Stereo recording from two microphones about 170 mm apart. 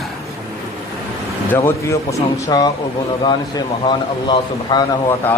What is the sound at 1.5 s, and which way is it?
A man's voice, 15° left (ahead or behind).